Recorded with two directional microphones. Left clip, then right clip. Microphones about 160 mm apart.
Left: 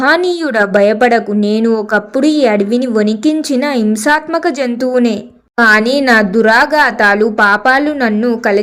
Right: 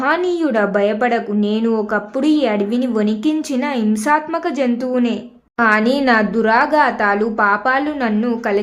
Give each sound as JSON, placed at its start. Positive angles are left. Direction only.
{"t": 0.0, "sound": "speech", "side_deg": 30}